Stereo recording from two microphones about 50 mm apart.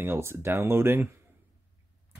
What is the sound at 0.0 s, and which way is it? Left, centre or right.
Speech, right.